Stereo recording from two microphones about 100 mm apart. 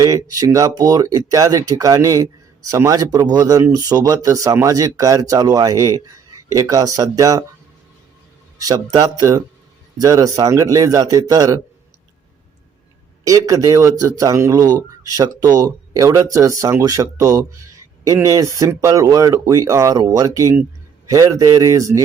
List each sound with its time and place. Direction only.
0.0 s speech: 35° right (ahead or behind)
8.6 s speech: 40° right (ahead or behind)
13.2 s speech: 35° right (ahead or behind)